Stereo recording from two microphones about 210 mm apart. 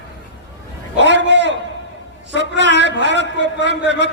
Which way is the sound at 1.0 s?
60° right (ahead or behind).